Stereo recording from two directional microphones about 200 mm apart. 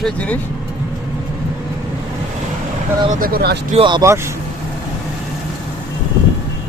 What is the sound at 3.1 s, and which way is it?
Speech, 45° right (ahead or behind).